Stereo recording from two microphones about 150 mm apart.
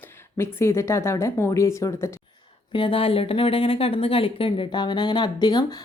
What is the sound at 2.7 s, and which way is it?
Speech, 35° left (ahead or behind).